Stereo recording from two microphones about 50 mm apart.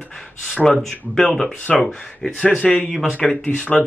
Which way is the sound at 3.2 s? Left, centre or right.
Left.